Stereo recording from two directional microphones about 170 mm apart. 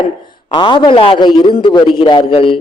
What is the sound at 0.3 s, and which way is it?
A man's voice, 25° left (ahead or behind).